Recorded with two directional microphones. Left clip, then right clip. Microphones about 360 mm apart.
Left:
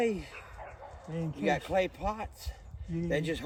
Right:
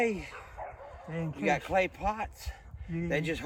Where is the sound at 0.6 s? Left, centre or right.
Centre.